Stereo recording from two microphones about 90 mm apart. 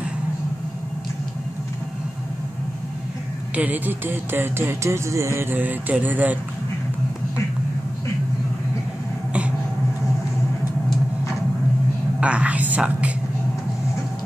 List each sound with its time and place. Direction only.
3.5 s music: 20° right (ahead or behind)
12.2 s whispering: 15° right (ahead or behind)